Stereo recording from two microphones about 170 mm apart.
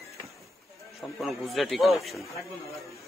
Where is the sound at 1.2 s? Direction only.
Centre (ahead or behind).